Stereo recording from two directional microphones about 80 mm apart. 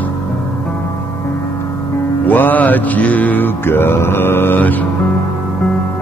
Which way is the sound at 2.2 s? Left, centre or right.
Left.